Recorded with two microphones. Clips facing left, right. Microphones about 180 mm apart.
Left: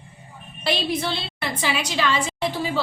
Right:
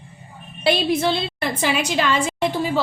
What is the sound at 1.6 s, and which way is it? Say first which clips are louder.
Speech: right 3 dB; 50° right (ahead or behind).